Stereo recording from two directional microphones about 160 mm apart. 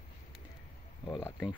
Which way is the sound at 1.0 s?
25° left (ahead or behind).